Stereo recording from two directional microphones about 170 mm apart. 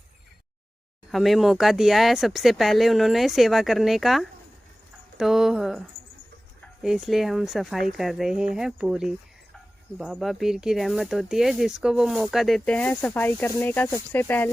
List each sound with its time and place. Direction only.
1.1 s speech: centre (ahead or behind)